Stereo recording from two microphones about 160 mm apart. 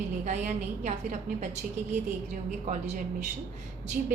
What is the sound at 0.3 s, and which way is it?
A woman's voice, 50° right (ahead or behind).